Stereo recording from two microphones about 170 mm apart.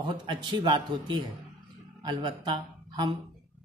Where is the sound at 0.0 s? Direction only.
25° right (ahead or behind).